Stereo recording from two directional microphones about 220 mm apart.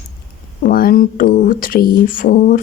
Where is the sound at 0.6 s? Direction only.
40° left (ahead or behind).